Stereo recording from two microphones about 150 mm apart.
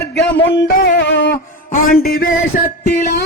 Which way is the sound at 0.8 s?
75° left (ahead or behind).